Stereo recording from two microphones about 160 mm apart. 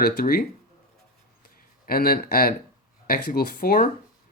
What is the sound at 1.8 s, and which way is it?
Speech, 70° left (ahead or behind).